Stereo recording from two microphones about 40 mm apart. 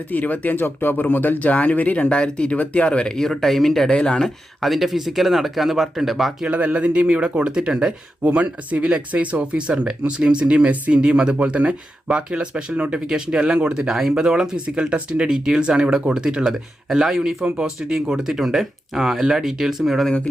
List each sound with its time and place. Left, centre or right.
0.1 s speech: left
1.5 s speech: left
2.0 s speech: left
3.2 s speech: centre
3.8 s speech: left
4.6 s speech: centre
6.4 s speech: right; by 20.0 s centre